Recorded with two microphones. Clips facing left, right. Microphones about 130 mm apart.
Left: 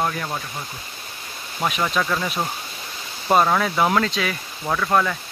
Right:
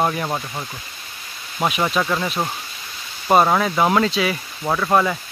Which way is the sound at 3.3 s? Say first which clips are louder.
Right 2 dB; 15° right (ahead or behind).